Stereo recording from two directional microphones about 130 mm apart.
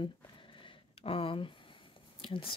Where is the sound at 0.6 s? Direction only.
45° left (ahead or behind).